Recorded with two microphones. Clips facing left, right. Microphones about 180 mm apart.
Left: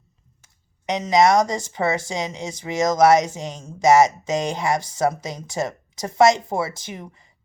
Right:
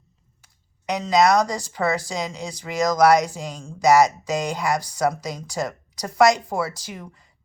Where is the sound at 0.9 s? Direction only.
20° left (ahead or behind).